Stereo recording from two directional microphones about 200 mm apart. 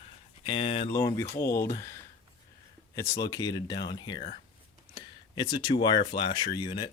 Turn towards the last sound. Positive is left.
turn(degrees=20)  # may be behind; listen again after turning